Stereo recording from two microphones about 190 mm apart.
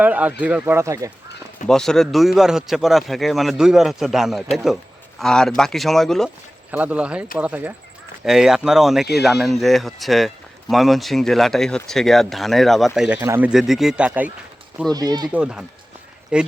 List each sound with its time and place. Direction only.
0.0 s speech: 10° right (ahead or behind)
1.6 s a man's voice: 5° left (ahead or behind)
14.8 s speech: 20° right (ahead or behind)
15.3 s a man's voice: 5° right (ahead or behind)